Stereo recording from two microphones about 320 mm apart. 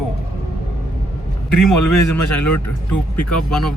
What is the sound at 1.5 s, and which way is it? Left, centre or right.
A man's voice, left.